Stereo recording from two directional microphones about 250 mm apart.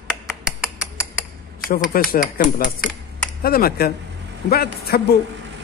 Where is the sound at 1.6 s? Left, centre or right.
Left.